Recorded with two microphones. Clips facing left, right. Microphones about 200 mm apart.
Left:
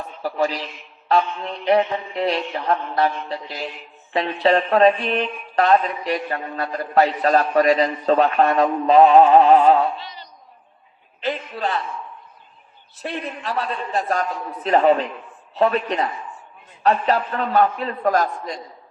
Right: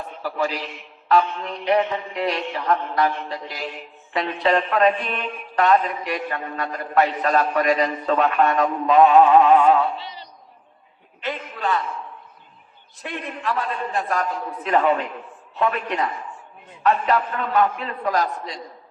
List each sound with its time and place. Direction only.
0.2 s a man's voice: 40° left (ahead or behind)
11.2 s speech: 35° left (ahead or behind)
13.0 s speech: 35° left (ahead or behind)